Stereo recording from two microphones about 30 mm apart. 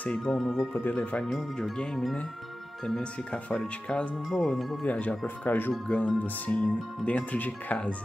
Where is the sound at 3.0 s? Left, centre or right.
Left.